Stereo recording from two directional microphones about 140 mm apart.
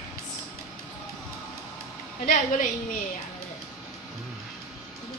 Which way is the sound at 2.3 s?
70° left (ahead or behind).